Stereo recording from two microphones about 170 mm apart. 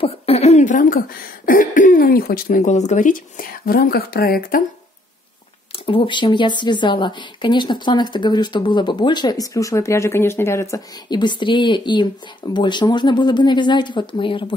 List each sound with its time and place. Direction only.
0.0 s speech: 40° left (ahead or behind); by 4.6 s 60° left (ahead or behind)
5.9 s speech: 30° left (ahead or behind)